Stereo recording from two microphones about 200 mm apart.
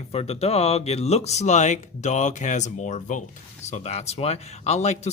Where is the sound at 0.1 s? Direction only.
30° left (ahead or behind).